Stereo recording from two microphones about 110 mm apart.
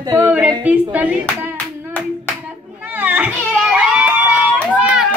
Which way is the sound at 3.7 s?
10° right (ahead or behind).